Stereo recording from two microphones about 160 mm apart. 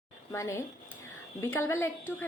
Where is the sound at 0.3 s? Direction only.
20° left (ahead or behind).